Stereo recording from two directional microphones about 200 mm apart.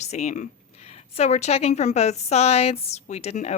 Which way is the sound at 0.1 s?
35° left (ahead or behind).